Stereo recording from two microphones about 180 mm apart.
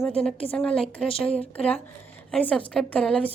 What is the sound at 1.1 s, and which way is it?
Speech, 30° left (ahead or behind).